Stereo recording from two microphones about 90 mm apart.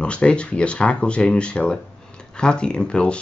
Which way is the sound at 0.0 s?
10° left (ahead or behind).